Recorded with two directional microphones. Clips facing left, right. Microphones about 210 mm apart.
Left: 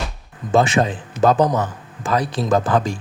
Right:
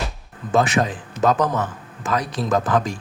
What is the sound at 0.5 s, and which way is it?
A man's voice, 25° left (ahead or behind).